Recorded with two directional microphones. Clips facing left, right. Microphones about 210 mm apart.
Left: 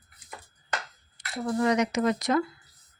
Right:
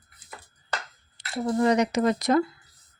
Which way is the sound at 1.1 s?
30° right (ahead or behind).